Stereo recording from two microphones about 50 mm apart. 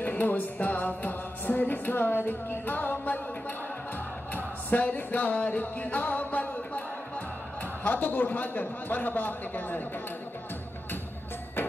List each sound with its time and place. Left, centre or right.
0.0 s music: left
4.4 s music: left
7.8 s music: left